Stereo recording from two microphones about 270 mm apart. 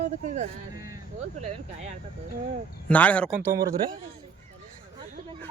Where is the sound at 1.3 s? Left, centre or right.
Right.